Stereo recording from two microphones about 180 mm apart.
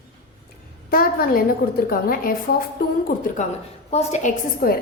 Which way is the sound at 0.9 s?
55° left (ahead or behind).